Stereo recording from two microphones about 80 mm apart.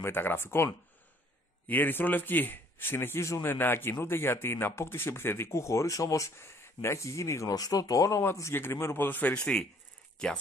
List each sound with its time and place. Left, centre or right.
0.0 s speech: left
1.7 s a man's voice: left
8.2 s a man's voice: left; by 10.4 s centre